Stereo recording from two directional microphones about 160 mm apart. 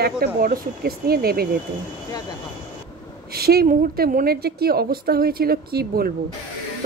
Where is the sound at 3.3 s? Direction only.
75° right (ahead or behind).